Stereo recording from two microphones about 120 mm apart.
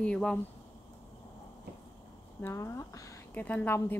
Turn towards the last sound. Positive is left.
turn(degrees=15)  # may be behind; listen again after turning